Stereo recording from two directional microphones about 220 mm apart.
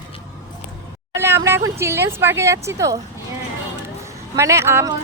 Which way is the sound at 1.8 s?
10° right (ahead or behind).